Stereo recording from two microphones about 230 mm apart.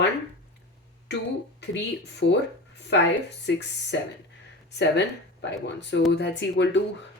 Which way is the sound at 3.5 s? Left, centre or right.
Left.